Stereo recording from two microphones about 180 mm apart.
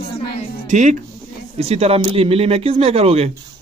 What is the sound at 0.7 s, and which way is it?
Speech, 45° right (ahead or behind).